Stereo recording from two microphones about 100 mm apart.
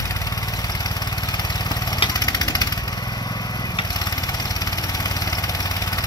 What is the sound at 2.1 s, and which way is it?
Vehicle, 40° left (ahead or behind).